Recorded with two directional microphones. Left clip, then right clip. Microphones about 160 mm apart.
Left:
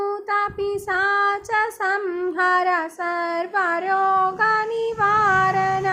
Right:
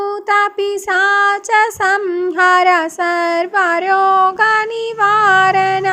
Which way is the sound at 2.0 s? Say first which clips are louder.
Right 7 dB; 20° right (ahead or behind).